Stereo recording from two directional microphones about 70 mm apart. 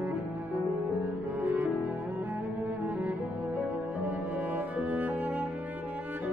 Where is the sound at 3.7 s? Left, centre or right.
Right.